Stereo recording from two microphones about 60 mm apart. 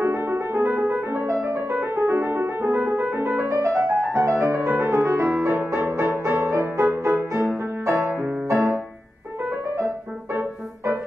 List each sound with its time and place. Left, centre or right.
0.0 s music: right
3.4 s music: right
4.6 s music: right
4.9 s music: right